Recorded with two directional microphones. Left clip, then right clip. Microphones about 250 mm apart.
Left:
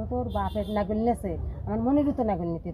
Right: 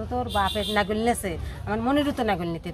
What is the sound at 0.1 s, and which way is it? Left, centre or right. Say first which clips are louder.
A woman's voice: right 5 dB; right.